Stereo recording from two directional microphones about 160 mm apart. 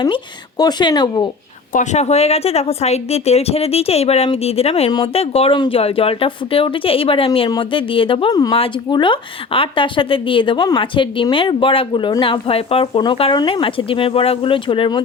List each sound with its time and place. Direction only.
0.6 s speech: 25° left (ahead or behind)
1.7 s a woman's voice: 50° left (ahead or behind)
8.3 s speech: 20° left (ahead or behind)
8.5 s a woman's voice: 35° left (ahead or behind)